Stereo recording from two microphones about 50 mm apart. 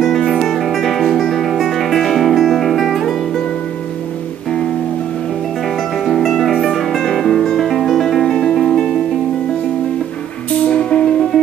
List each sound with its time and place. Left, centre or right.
0.0 s music: centre
5.9 s music: centre
10.7 s music: left